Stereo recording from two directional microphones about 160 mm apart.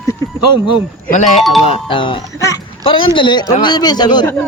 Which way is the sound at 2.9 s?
35° left (ahead or behind).